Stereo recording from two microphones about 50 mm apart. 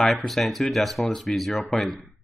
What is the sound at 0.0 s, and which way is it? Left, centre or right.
Speech, centre.